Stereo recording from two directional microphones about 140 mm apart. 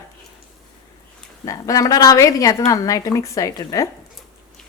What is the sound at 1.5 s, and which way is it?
A woman's voice, 25° left (ahead or behind).